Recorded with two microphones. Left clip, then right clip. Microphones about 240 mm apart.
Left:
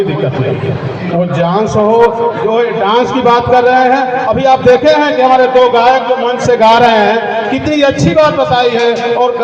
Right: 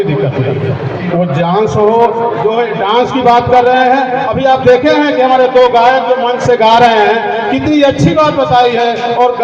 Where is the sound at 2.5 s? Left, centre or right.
Left.